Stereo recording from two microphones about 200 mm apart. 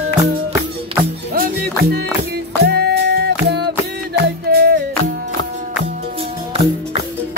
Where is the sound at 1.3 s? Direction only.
45° right (ahead or behind).